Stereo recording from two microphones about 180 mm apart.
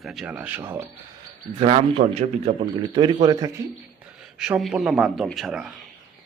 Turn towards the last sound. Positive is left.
turn(degrees=0)  # may be behind; listen again after turning